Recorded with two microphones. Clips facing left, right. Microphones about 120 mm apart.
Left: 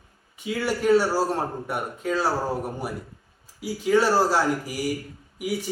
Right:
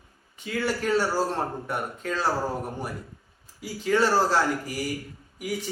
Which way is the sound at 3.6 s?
10° left (ahead or behind).